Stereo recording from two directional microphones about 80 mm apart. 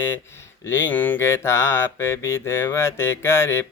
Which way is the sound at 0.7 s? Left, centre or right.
Left.